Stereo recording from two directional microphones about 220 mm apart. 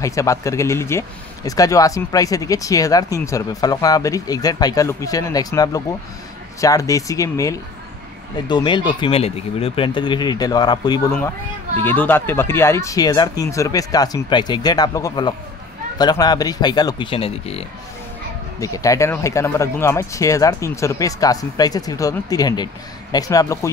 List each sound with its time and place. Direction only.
0.0 s speech: 15° left (ahead or behind)
18.6 s speech: 15° left (ahead or behind)